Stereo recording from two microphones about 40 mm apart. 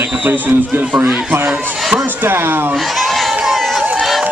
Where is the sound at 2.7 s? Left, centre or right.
Centre.